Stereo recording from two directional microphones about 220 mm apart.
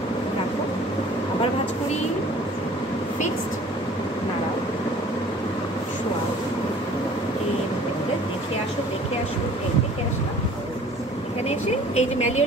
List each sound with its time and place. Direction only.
11.4 s vehicle: 30° left (ahead or behind)